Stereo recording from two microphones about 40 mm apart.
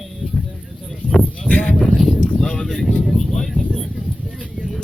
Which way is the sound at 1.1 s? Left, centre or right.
Centre.